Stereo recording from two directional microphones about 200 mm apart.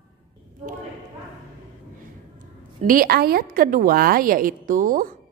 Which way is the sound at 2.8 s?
45° right (ahead or behind).